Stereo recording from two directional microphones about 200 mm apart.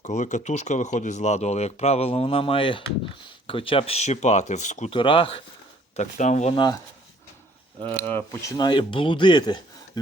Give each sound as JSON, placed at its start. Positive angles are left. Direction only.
{"t": 0.0, "sound": "speech", "side_deg": 35}
{"t": 4.9, "sound": "speech", "side_deg": 25}
{"t": 6.0, "sound": "speech", "side_deg": 40}
{"t": 8.0, "sound": "speech", "side_deg": 10}